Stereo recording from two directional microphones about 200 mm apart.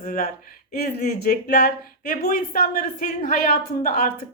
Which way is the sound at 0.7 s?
50° left (ahead or behind).